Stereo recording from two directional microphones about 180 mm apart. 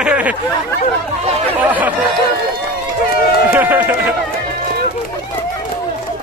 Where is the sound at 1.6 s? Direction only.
10° right (ahead or behind).